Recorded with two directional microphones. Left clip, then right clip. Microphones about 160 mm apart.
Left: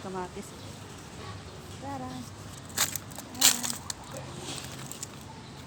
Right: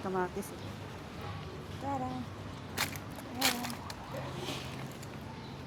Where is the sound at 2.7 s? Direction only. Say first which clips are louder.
Left 5 dB; 70° left (ahead or behind).